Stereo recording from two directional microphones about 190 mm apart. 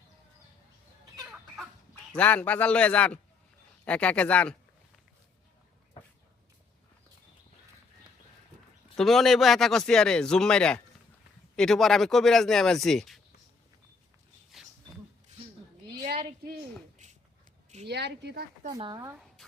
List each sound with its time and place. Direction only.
2.1 s speech: 10° left (ahead or behind)
9.0 s speech: centre (ahead or behind)
14.5 s roaring cats: centre (ahead or behind)
17.8 s speech: 60° right (ahead or behind)
18.7 s speech: 20° right (ahead or behind)